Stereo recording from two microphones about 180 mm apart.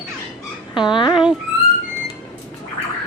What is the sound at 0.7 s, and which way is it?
Speech, 25° left (ahead or behind).